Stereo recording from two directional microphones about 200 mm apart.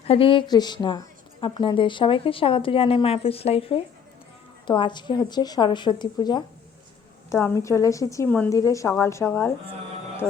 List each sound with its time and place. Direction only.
0.0 s a woman's voice: 30° left (ahead or behind); by 9.5 s 10° left (ahead or behind)